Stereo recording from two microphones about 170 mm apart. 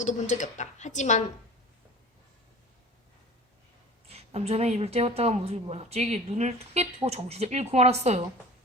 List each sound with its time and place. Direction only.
0.0 s a woman's voice: 45° left (ahead or behind)
4.1 s a woman's voice: 35° right (ahead or behind)